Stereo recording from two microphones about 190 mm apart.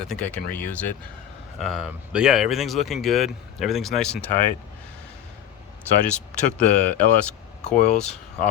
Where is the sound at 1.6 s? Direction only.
Centre (ahead or behind).